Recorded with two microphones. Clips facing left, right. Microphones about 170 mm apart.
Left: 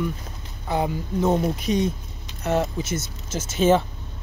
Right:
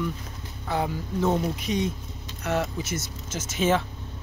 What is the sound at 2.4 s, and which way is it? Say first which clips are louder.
Speech: left 4 dB; 30° left (ahead or behind).